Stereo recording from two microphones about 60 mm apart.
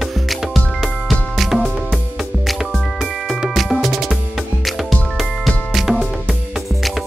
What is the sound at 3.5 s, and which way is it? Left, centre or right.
Music, centre.